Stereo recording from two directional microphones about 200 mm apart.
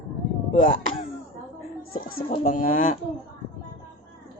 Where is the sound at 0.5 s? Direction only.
40° left (ahead or behind).